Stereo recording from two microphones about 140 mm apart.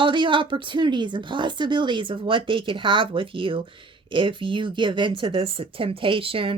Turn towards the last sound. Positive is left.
turn(degrees=-40)  # may be behind; listen again after turning